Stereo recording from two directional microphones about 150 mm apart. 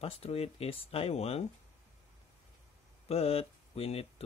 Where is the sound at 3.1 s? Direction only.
40° left (ahead or behind).